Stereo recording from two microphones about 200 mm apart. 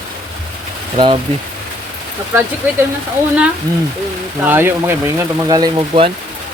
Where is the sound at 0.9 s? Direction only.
25° right (ahead or behind).